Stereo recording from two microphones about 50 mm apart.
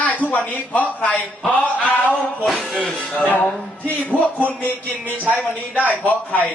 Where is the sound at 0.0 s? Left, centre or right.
Left.